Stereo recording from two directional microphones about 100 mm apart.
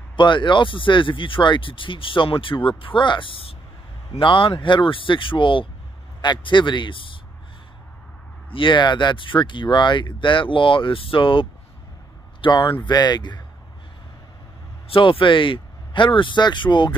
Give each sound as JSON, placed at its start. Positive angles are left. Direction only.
{"t": 0.1, "sound": "a man's voice", "side_deg": 50}
{"t": 8.5, "sound": "a man's voice", "side_deg": 55}
{"t": 14.9, "sound": "speech", "side_deg": 60}